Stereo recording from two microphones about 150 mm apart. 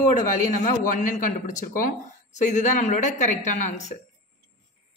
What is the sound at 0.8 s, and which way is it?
Speech, 65° left (ahead or behind).